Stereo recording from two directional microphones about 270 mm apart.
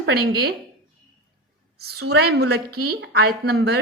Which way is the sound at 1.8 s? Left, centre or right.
Right.